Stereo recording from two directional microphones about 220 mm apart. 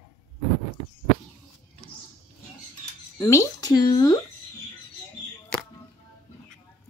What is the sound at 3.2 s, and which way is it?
Speech, 15° left (ahead or behind).